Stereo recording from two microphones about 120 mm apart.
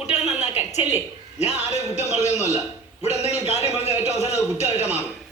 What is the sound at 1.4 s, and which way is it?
A man's voice, 65° left (ahead or behind).